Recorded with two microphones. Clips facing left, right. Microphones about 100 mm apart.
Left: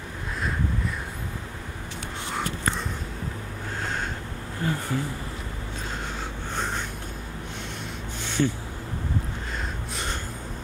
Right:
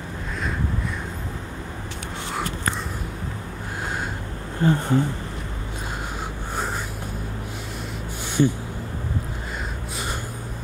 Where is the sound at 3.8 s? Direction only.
10° right (ahead or behind).